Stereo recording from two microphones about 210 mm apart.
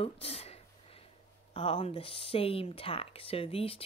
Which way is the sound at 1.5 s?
25° left (ahead or behind).